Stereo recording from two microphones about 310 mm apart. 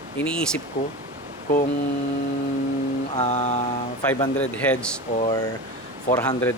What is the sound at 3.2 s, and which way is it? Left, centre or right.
Mantra, left.